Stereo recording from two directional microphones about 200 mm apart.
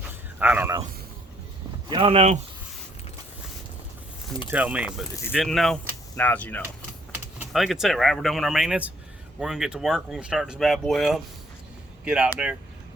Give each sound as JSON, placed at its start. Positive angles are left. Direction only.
{"t": 0.0, "sound": "a sound", "side_deg": -10}
{"t": 1.9, "sound": "speech", "side_deg": -25}
{"t": 4.4, "sound": "speech", "side_deg": -10}